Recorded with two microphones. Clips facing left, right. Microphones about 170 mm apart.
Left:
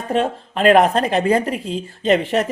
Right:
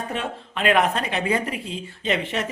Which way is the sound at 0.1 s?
35° left (ahead or behind).